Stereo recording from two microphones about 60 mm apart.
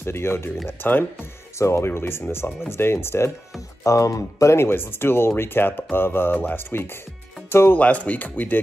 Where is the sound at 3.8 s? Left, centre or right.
Left.